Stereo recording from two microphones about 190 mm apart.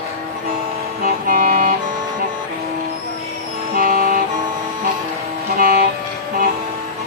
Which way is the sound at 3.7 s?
50° right (ahead or behind).